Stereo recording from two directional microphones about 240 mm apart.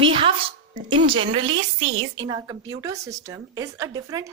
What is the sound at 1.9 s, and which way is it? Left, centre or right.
Speech, right.